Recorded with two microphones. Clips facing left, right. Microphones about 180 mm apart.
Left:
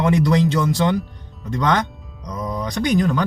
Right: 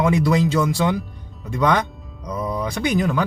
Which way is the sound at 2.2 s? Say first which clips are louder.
Right 1 dB; 5° right (ahead or behind).